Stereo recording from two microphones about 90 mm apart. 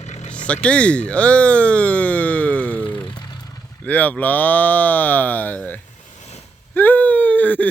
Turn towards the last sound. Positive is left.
turn(degrees=15)  # may be behind; listen again after turning